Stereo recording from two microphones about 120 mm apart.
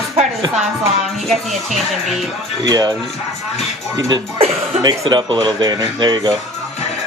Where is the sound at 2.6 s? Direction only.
30° right (ahead or behind).